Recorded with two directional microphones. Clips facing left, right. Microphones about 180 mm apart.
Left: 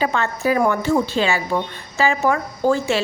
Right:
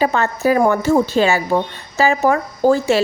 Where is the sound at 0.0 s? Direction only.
40° right (ahead or behind).